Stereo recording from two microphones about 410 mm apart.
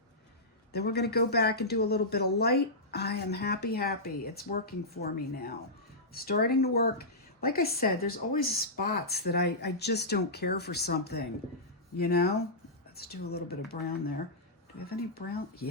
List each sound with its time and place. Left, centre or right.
0.7 s a woman's voice: left